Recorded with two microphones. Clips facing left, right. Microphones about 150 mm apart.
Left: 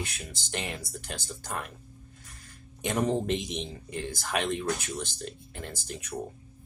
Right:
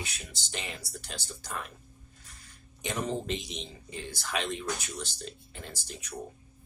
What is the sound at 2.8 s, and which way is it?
Speech, 60° left (ahead or behind).